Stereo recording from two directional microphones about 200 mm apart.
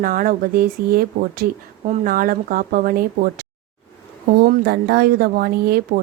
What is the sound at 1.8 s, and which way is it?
Speech, 40° right (ahead or behind).